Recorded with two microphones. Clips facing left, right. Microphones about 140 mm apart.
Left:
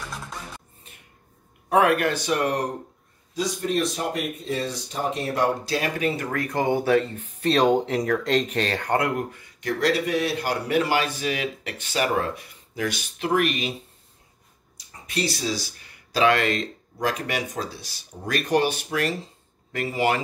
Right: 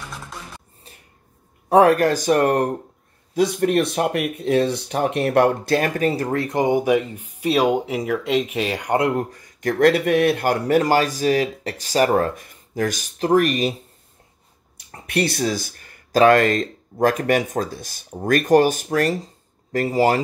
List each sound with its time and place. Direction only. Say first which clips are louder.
0.9 s a sound: right 6 dB; 35° right (ahead or behind)
1.7 s speech: right 6 dB; 35° right (ahead or behind)
9.3 s a man's voice: right 4 dB; 45° right (ahead or behind)
14.8 s a man's voice: right 6 dB; 60° right (ahead or behind); by 20.2 s 40° right (ahead or behind)